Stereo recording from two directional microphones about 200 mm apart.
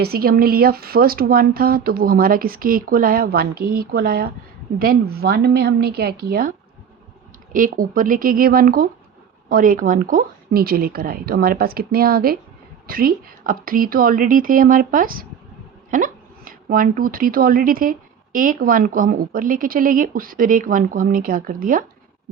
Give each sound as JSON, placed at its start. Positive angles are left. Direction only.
{"t": 0.0, "sound": "speech", "side_deg": -50}
{"t": 7.5, "sound": "speech", "side_deg": -45}